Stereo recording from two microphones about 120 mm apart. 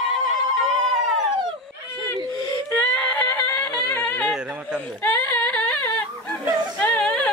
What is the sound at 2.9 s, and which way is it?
Music, 15° left (ahead or behind).